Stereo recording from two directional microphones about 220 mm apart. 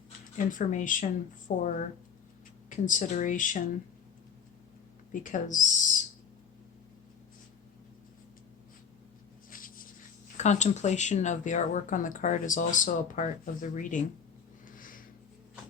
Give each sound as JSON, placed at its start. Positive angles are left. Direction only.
{"t": 0.3, "sound": "speech", "side_deg": 35}
{"t": 2.6, "sound": "speech", "side_deg": 35}
{"t": 5.2, "sound": "speech", "side_deg": 35}
{"t": 9.5, "sound": "a sound", "side_deg": 40}
{"t": 10.3, "sound": "speech", "side_deg": 30}
{"t": 14.7, "sound": "a sound", "side_deg": 40}